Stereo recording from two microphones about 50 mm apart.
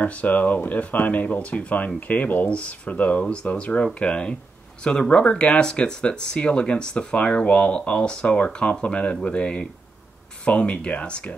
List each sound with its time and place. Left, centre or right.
0.0 s speech: left